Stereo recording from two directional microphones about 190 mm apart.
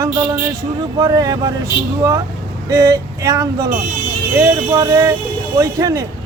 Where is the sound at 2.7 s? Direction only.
20° right (ahead or behind).